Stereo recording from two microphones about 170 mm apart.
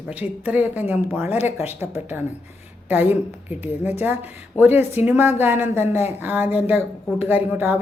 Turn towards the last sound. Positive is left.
turn(degrees=-10)  # may be behind; listen again after turning